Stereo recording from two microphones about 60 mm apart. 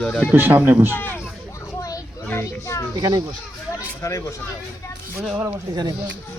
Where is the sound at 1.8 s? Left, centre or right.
Left.